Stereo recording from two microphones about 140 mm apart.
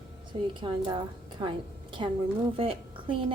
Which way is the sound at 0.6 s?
35° right (ahead or behind).